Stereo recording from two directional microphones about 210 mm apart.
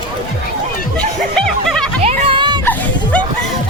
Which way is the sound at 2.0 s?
25° right (ahead or behind).